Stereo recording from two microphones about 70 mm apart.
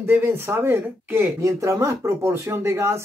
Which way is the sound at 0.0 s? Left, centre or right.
Right.